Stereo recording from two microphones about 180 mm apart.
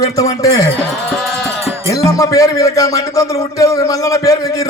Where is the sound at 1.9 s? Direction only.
20° left (ahead or behind).